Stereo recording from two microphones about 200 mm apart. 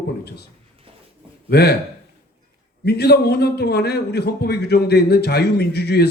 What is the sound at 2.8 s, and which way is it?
A man's voice, 55° left (ahead or behind).